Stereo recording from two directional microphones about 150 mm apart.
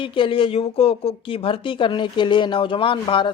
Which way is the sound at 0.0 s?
35° left (ahead or behind).